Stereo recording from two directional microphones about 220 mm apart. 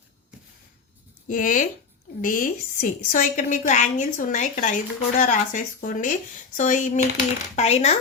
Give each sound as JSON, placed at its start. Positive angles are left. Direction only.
{"t": 1.3, "sound": "a woman's voice", "side_deg": 35}